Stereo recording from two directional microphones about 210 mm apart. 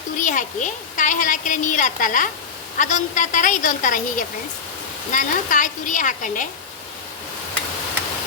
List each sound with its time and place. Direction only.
0.2 s a woman's voice: 35° left (ahead or behind)